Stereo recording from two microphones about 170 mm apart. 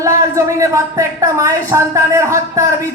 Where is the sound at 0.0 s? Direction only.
20° right (ahead or behind).